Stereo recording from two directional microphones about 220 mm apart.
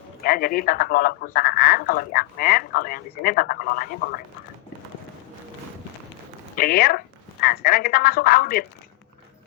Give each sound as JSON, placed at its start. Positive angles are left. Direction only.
{"t": 0.2, "sound": "speech", "side_deg": 40}
{"t": 6.6, "sound": "speech", "side_deg": 45}